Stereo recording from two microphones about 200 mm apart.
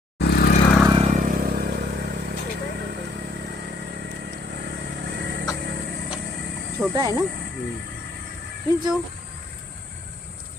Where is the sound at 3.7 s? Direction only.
50° right (ahead or behind).